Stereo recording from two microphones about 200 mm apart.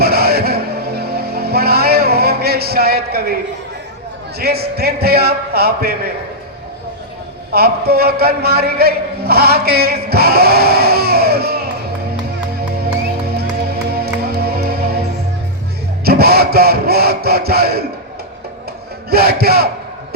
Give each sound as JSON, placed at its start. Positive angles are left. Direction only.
{"t": 0.0, "sound": "music", "side_deg": -50}
{"t": 4.4, "sound": "a man's voice", "side_deg": -50}
{"t": 7.5, "sound": "a man's voice", "side_deg": -50}
{"t": 13.3, "sound": "music", "side_deg": -50}
{"t": 16.0, "sound": "speech", "side_deg": -50}
{"t": 19.1, "sound": "a man's voice", "side_deg": -50}